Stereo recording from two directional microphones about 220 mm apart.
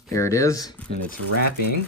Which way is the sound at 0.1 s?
15° left (ahead or behind).